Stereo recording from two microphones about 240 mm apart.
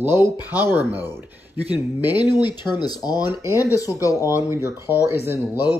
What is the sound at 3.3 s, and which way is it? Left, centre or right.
Speech, centre.